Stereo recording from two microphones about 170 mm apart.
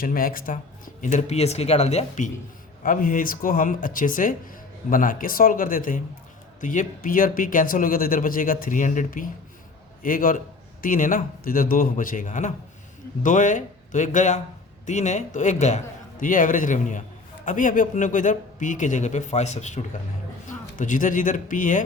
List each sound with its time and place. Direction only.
0.0 s speech: 60° left (ahead or behind)
1.0 s speech: 40° left (ahead or behind)